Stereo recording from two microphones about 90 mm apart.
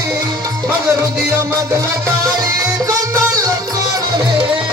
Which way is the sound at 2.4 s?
40° right (ahead or behind).